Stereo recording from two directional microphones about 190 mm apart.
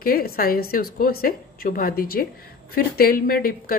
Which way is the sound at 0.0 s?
50° left (ahead or behind).